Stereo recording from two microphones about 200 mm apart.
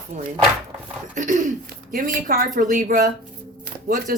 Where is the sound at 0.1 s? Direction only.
35° right (ahead or behind).